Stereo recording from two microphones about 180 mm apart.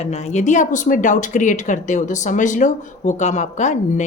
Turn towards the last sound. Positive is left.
turn(degrees=40)  # may be behind; listen again after turning